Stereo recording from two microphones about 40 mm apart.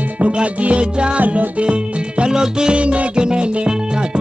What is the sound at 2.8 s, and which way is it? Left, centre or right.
Music, right.